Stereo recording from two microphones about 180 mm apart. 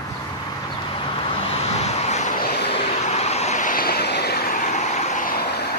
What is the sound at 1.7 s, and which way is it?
Vehicle, 40° left (ahead or behind).